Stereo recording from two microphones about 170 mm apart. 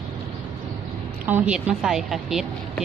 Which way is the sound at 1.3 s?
10° right (ahead or behind).